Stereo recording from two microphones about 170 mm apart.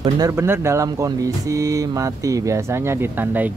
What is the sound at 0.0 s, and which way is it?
Speech, 20° right (ahead or behind).